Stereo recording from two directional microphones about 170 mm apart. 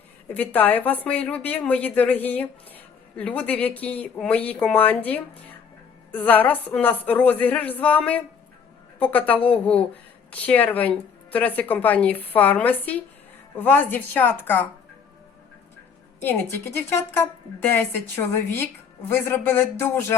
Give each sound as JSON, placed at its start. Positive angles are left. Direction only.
{"t": 0.3, "sound": "speech", "side_deg": 10}
{"t": 6.1, "sound": "speech", "side_deg": 10}
{"t": 16.2, "sound": "speech", "side_deg": 10}